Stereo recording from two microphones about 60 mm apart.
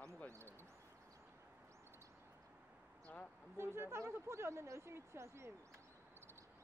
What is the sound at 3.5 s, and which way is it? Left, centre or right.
Speech, right.